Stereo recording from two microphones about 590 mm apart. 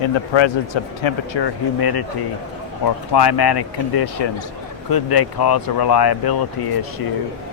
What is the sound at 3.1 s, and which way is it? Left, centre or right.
Speech, left.